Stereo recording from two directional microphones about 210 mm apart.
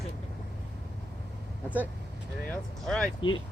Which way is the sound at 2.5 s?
5° left (ahead or behind).